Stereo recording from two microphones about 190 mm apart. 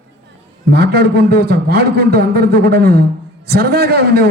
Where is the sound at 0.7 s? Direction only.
55° right (ahead or behind).